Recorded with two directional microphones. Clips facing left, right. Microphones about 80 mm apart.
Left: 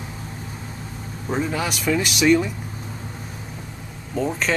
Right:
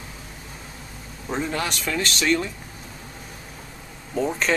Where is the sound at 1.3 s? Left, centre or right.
Centre.